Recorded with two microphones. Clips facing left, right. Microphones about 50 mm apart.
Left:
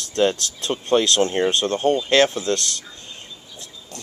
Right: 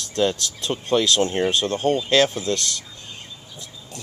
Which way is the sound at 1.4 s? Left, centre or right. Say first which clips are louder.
Left 1 dB; left.